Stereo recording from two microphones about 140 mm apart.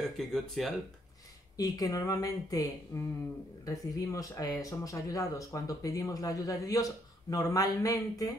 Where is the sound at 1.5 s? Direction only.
25° left (ahead or behind).